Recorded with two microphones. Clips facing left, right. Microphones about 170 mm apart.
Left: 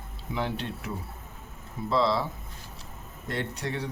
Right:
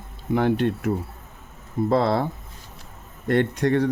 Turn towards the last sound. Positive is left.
turn(degrees=-55)  # may be behind; listen again after turning